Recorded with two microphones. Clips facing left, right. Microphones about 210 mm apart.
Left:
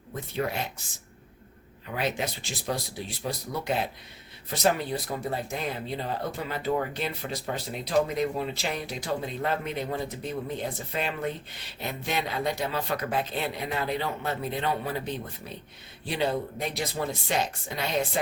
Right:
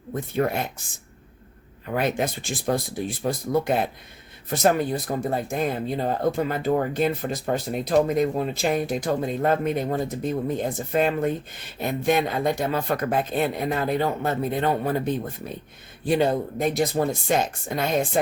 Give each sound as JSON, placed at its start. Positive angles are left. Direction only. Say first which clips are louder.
{"t": 0.1, "sound": "speech", "louder": "right 6 dB", "side_deg": -50}
{"t": 1.9, "sound": "speech", "louder": "right 6 dB", "side_deg": -50}